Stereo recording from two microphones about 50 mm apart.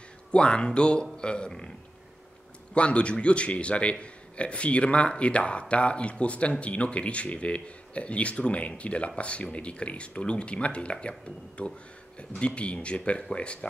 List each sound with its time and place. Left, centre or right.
0.3 s a man's voice: left
2.7 s a man's voice: left